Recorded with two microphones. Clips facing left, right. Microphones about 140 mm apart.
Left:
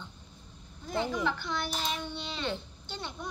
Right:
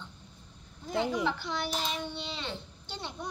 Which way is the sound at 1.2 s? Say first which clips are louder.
Even; 30° right (ahead or behind).